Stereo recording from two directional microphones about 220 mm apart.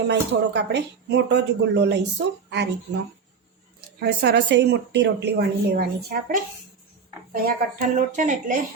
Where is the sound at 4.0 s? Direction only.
50° right (ahead or behind).